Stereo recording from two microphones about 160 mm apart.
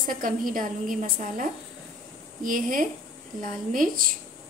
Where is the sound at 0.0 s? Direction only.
60° right (ahead or behind).